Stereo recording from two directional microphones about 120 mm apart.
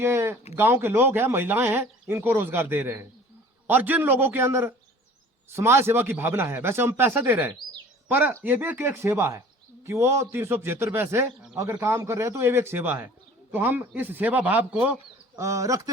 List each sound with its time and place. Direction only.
0.0 s a man's voice: 20° right (ahead or behind)
15.4 s speech: 25° right (ahead or behind)